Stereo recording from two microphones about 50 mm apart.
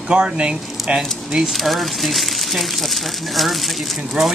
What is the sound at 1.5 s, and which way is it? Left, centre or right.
Speech, centre.